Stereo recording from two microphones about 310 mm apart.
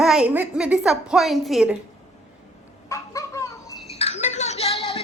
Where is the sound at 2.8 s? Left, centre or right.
Centre.